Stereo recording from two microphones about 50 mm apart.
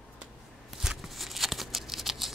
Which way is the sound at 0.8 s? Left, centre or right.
Centre.